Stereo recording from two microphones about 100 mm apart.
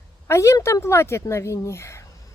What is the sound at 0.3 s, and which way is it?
Speech, 30° left (ahead or behind).